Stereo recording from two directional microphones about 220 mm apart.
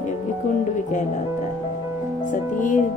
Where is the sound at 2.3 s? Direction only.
35° left (ahead or behind).